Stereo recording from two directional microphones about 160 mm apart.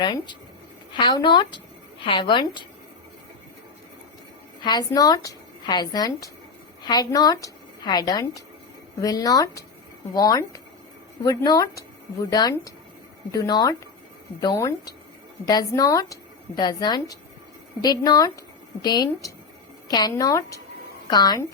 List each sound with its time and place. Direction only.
0.0 s a woman's voice: 30° left (ahead or behind)
4.6 s a woman's voice: 25° left (ahead or behind)